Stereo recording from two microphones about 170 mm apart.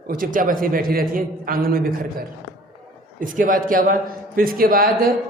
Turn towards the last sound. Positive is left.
turn(degrees=-60)  # may be behind; listen again after turning